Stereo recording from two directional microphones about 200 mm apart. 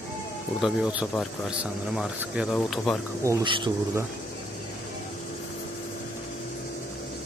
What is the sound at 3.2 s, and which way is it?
Speech, 20° right (ahead or behind).